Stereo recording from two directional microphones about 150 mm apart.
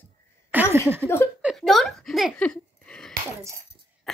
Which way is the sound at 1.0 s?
15° left (ahead or behind).